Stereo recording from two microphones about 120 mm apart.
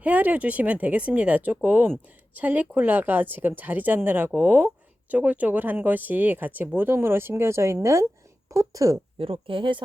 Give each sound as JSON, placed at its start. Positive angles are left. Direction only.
{"t": 0.0, "sound": "speech", "side_deg": -15}
{"t": 9.1, "sound": "speech", "side_deg": -45}